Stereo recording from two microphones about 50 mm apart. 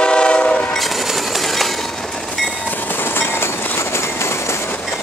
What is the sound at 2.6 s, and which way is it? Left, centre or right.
Train, left.